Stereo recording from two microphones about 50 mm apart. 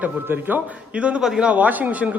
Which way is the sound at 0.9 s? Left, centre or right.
Right.